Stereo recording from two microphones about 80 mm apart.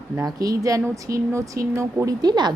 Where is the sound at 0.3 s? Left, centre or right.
Right.